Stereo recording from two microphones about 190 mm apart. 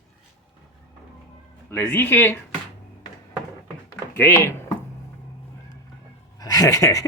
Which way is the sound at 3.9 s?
10° left (ahead or behind).